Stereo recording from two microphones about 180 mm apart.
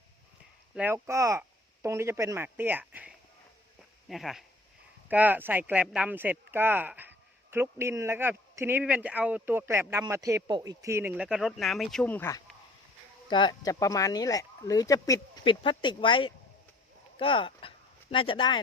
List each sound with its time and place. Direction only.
0.7 s speech: 10° right (ahead or behind); by 12.4 s 10° left (ahead or behind)
13.3 s speech: 25° left (ahead or behind)